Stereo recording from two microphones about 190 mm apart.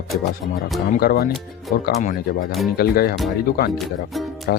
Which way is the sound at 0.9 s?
50° left (ahead or behind).